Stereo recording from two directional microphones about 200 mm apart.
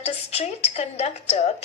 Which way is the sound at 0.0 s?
30° left (ahead or behind).